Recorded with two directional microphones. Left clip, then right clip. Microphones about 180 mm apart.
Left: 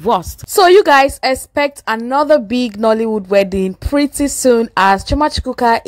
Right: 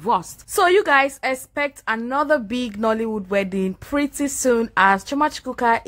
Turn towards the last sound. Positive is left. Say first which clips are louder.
# left 6 dB
turn(degrees=30)  # may be behind; listen again after turning